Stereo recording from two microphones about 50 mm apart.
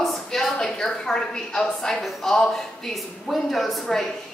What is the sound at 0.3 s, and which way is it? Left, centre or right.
A woman's voice, centre.